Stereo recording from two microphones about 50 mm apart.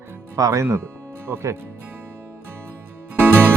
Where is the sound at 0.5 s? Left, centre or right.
Right.